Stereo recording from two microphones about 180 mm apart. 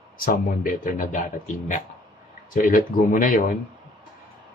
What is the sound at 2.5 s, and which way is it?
Speech, 50° left (ahead or behind).